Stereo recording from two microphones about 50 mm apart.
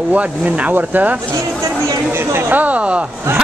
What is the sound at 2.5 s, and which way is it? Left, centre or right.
Speech, right.